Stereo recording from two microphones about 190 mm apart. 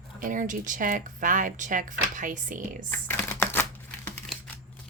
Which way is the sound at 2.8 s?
10° left (ahead or behind).